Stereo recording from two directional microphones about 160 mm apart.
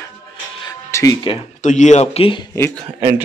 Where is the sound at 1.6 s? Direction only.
50° left (ahead or behind).